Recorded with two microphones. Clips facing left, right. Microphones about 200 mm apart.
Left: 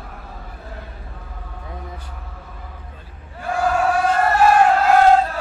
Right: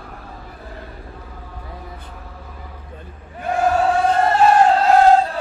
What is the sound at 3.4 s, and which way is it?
Crowd, 20° right (ahead or behind).